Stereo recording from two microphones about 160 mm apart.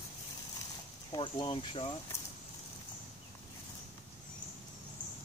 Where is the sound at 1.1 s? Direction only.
30° left (ahead or behind).